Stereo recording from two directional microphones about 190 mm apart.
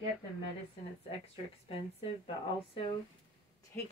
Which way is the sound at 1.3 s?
30° left (ahead or behind).